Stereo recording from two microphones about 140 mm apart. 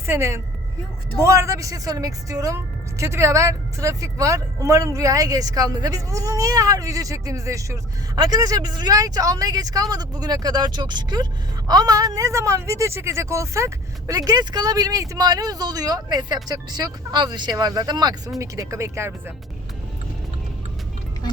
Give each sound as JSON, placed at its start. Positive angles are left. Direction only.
{"t": 0.0, "sound": "speech", "side_deg": -20}